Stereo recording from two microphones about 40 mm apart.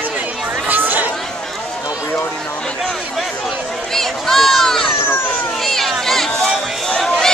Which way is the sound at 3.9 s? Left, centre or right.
Centre.